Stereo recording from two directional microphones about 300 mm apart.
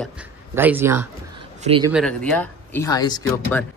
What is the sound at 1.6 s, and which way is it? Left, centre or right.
Speech, centre.